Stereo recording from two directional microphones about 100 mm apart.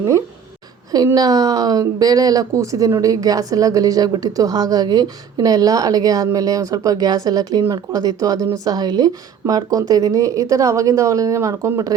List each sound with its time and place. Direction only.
0.9 s a woman's voice: 40° right (ahead or behind)